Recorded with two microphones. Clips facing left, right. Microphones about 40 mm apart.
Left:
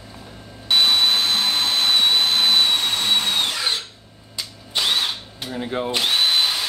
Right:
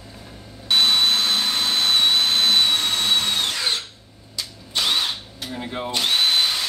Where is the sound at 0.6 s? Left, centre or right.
Centre.